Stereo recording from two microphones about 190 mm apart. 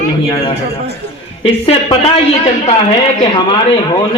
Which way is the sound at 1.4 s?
30° left (ahead or behind).